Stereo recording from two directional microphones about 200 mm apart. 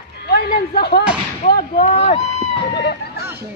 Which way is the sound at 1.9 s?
30° left (ahead or behind).